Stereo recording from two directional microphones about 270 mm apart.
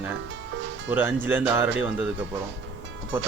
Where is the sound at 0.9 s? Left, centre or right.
Centre.